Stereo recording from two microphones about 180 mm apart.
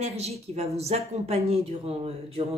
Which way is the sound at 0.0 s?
35° right (ahead or behind).